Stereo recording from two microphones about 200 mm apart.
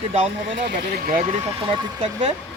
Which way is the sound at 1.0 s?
30° right (ahead or behind).